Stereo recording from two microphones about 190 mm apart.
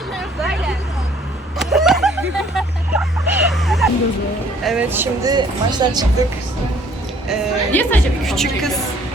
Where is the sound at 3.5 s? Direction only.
Centre (ahead or behind).